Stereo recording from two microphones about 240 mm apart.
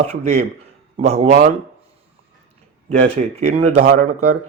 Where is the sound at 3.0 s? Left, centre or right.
Right.